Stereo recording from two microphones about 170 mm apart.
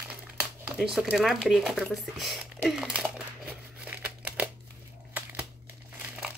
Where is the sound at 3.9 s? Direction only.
10° right (ahead or behind).